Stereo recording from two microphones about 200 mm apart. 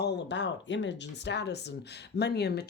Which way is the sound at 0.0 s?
55° left (ahead or behind).